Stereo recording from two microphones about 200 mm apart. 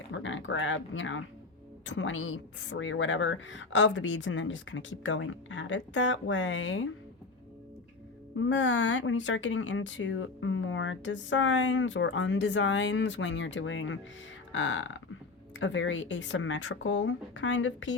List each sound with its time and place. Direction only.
0.1 s speech: 70° left (ahead or behind)
8.4 s speech: 70° left (ahead or behind)